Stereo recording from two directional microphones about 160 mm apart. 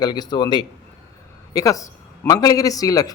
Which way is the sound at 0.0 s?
25° left (ahead or behind).